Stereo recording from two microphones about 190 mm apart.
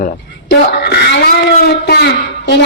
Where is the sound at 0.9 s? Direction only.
55° left (ahead or behind).